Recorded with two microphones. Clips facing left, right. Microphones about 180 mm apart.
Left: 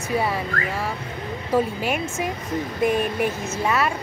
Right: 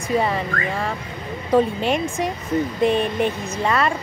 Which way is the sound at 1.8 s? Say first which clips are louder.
Right 4 dB; 5° left (ahead or behind).